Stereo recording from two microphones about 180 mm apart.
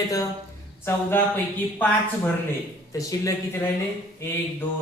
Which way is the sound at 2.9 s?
20° left (ahead or behind).